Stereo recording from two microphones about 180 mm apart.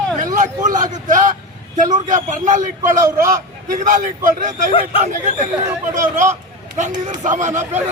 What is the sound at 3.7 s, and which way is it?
A man's voice, 45° right (ahead or behind).